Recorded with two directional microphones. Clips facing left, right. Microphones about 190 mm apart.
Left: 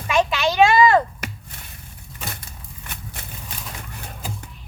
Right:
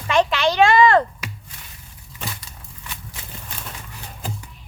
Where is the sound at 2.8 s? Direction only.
55° left (ahead or behind).